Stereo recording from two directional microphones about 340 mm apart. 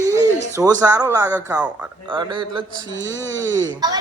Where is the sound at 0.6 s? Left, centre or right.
Centre.